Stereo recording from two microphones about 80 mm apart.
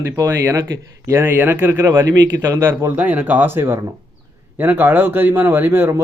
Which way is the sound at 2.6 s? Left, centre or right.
Right.